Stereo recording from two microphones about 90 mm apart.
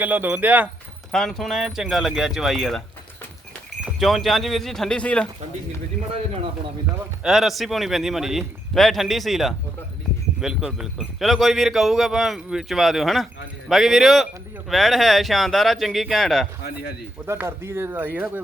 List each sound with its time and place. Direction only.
0.0 s speech: 20° right (ahead or behind)
1.1 s speech: 5° left (ahead or behind)
4.0 s speech: centre (ahead or behind)
7.2 s speech: 5° right (ahead or behind)
17.2 s speech: 30° right (ahead or behind)